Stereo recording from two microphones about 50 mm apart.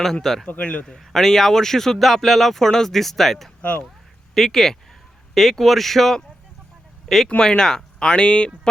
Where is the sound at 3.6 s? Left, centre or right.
Left.